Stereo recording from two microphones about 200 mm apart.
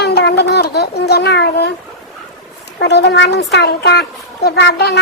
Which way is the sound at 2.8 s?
60° left (ahead or behind).